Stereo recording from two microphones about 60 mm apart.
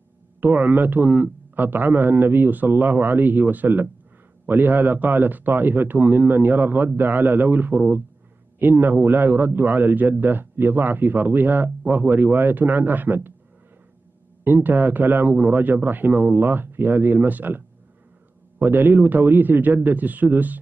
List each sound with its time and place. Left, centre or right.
0.4 s a man's voice: right
14.4 s a man's voice: right